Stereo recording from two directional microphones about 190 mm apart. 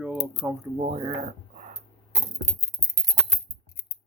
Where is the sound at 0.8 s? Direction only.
30° right (ahead or behind).